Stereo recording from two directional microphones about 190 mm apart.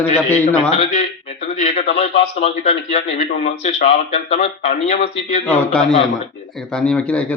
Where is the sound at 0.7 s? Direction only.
40° left (ahead or behind).